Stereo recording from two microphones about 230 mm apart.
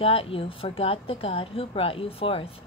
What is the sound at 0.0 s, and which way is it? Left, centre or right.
Speech, left.